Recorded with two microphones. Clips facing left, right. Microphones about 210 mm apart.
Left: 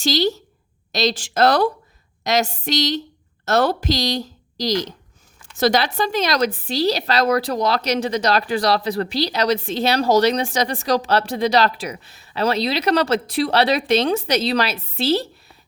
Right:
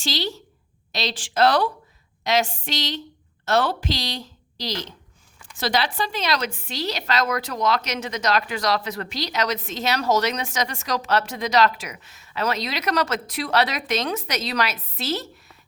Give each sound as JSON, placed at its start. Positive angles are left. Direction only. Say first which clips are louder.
{"t": 0.0, "sound": "a woman's voice", "louder": "left 8 dB", "side_deg": 40}